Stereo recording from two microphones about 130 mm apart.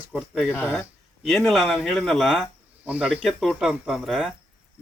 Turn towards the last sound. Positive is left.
turn(degrees=0)  # may be behind; listen again after turning